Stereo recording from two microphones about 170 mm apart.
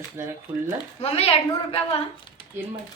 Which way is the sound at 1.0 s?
35° left (ahead or behind).